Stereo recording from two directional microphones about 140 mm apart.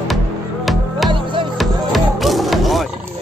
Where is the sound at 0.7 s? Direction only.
Centre (ahead or behind).